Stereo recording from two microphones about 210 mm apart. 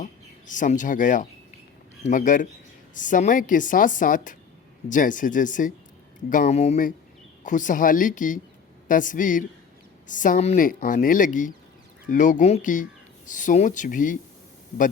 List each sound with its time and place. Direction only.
0.0 s speech: 35° left (ahead or behind)